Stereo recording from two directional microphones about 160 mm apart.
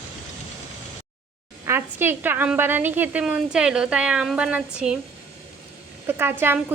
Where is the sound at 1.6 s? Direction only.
15° right (ahead or behind).